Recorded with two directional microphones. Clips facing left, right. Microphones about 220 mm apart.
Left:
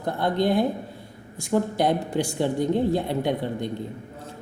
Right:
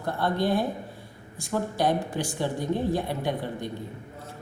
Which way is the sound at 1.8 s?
20° left (ahead or behind).